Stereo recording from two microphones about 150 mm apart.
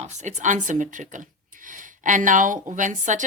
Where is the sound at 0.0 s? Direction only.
50° right (ahead or behind).